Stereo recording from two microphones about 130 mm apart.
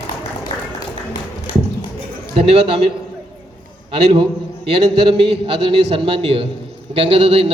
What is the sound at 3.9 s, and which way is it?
A man's voice, 45° right (ahead or behind).